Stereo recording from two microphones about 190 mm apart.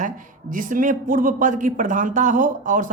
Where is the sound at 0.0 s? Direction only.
45° right (ahead or behind).